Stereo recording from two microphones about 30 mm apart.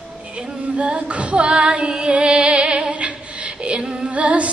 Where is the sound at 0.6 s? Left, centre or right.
Right.